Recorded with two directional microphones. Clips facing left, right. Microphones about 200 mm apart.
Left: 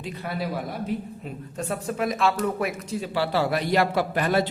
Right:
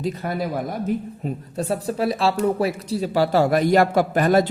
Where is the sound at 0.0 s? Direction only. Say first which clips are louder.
Right 6 dB; 45° right (ahead or behind).